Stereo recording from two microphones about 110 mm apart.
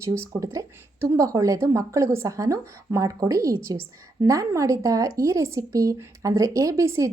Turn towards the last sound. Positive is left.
turn(degrees=-25)  # may be behind; listen again after turning